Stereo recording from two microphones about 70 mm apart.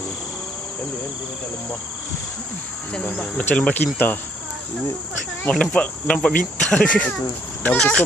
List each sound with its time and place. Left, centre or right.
3.5 s speech: centre
3.8 s speech: left
5.5 s speech: centre